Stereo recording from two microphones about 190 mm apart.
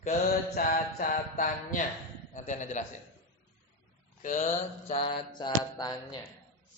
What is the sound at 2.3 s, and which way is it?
Speech, 40° left (ahead or behind).